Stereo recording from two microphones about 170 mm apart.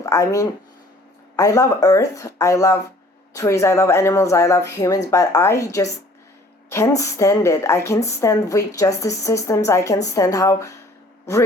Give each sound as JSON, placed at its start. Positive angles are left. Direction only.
{"t": 0.0, "sound": "a woman's voice", "side_deg": 20}